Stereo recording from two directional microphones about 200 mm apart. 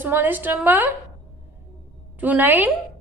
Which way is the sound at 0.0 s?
10° right (ahead or behind).